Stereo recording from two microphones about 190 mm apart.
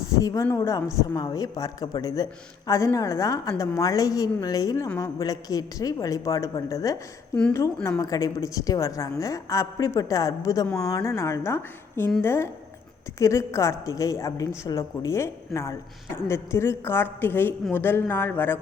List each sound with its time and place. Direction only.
0.2 s a woman's voice: 20° left (ahead or behind)